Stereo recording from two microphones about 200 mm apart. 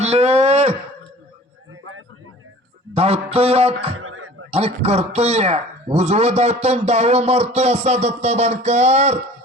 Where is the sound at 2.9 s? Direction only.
30° right (ahead or behind).